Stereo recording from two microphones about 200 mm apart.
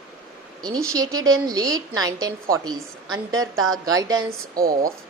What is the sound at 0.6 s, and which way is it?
A woman's voice, 15° right (ahead or behind).